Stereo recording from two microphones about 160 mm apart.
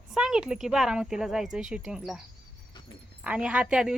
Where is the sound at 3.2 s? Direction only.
10° right (ahead or behind).